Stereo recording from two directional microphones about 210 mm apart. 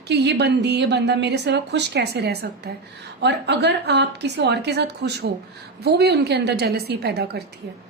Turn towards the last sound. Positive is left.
turn(degrees=-50)  # may be behind; listen again after turning